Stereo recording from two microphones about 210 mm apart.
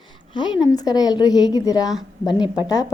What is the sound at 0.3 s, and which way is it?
A woman's voice, 20° left (ahead or behind).